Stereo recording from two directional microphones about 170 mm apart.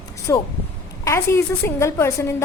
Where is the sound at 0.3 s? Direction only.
15° left (ahead or behind).